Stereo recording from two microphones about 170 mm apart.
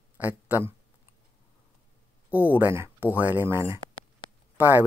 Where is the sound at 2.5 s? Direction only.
10° right (ahead or behind).